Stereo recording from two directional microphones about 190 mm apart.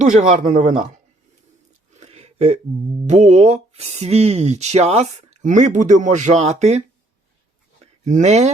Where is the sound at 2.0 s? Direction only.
35° right (ahead or behind).